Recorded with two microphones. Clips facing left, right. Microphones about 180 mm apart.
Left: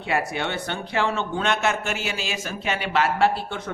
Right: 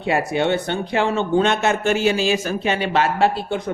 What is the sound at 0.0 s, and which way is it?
Speech, 25° right (ahead or behind).